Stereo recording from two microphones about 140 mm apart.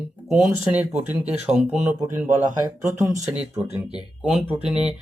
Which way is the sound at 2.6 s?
25° right (ahead or behind).